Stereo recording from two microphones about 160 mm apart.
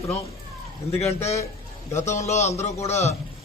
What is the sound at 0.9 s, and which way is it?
A man's voice, 40° left (ahead or behind).